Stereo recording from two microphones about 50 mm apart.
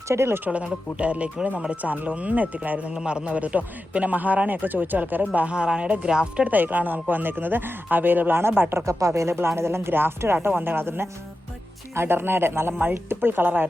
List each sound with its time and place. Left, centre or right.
0.1 s speech: right
0.6 s a man's voice: right
1.8 s a man's voice: right
5.2 s a man's voice: right
6.5 s speech: right
8.7 s speech: right
9.3 s speech: right